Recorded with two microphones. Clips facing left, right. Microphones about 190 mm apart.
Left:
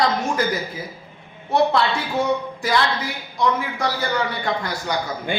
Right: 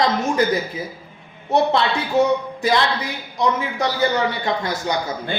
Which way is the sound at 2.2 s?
20° right (ahead or behind).